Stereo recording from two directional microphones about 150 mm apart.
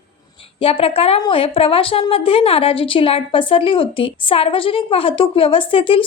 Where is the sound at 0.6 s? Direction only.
40° left (ahead or behind).